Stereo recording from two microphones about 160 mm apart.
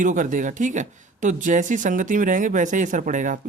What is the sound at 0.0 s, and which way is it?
A man's voice, 55° right (ahead or behind).